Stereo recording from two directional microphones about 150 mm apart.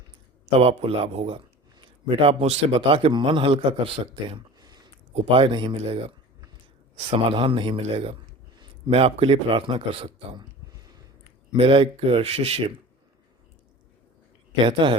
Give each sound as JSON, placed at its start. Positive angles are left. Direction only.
{"t": 0.6, "sound": "a man's voice", "side_deg": -40}
{"t": 5.1, "sound": "a man's voice", "side_deg": -40}
{"t": 7.1, "sound": "a man's voice", "side_deg": -35}
{"t": 11.5, "sound": "a man's voice", "side_deg": -40}
{"t": 14.5, "sound": "a man's voice", "side_deg": -35}